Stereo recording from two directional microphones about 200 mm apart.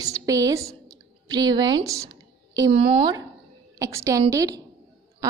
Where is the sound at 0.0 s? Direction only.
15° right (ahead or behind).